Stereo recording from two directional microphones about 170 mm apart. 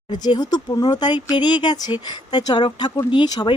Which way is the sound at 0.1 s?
25° left (ahead or behind).